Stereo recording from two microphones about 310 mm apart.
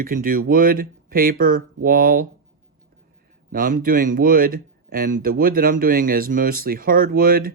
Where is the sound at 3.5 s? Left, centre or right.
Right.